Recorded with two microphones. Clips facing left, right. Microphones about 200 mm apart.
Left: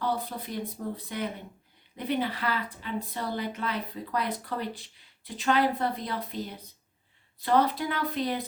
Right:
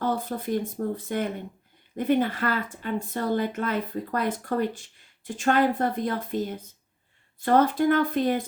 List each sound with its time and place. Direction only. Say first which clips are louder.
0.0 s a woman's voice: right 4 dB; 50° right (ahead or behind)